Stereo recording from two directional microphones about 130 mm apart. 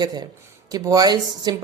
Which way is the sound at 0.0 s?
30° right (ahead or behind).